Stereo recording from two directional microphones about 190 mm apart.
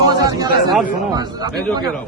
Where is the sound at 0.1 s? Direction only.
20° right (ahead or behind).